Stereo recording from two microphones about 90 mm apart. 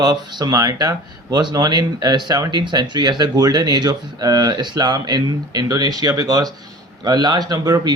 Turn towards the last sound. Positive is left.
turn(degrees=-45)  # may be behind; listen again after turning